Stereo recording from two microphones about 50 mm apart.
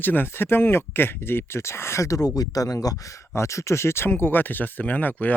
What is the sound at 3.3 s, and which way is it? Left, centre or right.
Speech, left.